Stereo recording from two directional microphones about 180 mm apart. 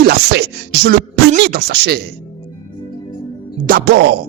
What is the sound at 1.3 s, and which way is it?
Speech, 55° right (ahead or behind).